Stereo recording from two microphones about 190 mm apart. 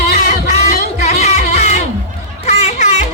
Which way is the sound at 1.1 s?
35° left (ahead or behind).